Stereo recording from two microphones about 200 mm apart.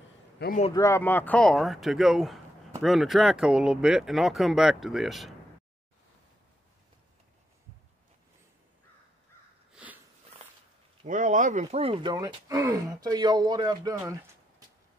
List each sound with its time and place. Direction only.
0.4 s a man's voice: 55° left (ahead or behind)
0.7 s speech: 15° left (ahead or behind)
9.7 s a sound: 5° right (ahead or behind)
11.1 s speech: 40° right (ahead or behind); by 14.1 s 20° right (ahead or behind)